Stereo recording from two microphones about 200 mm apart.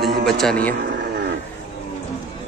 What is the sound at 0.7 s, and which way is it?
Vehicle, 55° right (ahead or behind).